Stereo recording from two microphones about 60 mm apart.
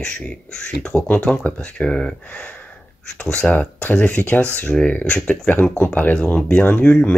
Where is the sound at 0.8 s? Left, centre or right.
Left.